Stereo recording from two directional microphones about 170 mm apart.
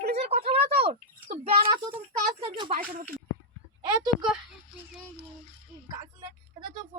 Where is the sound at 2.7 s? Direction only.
60° right (ahead or behind).